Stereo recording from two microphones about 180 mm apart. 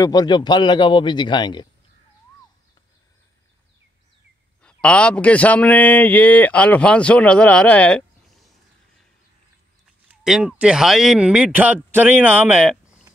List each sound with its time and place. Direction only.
0.0 s a man's voice: 20° left (ahead or behind)
4.6 s speech: 5° left (ahead or behind)
10.2 s speech: 5° right (ahead or behind)